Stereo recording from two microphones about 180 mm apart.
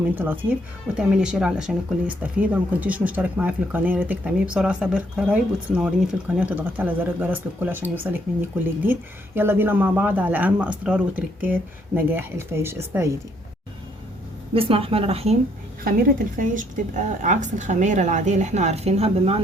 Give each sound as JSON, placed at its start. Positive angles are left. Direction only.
{"t": 0.2, "sound": "speech", "side_deg": -10}
{"t": 14.5, "sound": "a woman's voice", "side_deg": -30}
{"t": 15.8, "sound": "a woman's voice", "side_deg": -50}